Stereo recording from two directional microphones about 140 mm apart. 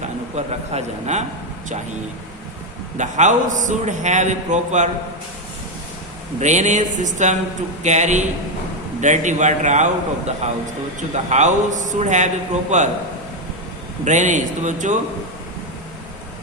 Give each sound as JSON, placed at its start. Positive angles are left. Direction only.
{"t": 0.0, "sound": "speech", "side_deg": -55}
{"t": 3.0, "sound": "a man's voice", "side_deg": -60}
{"t": 6.4, "sound": "a man's voice", "side_deg": -55}
{"t": 14.0, "sound": "a man's voice", "side_deg": -60}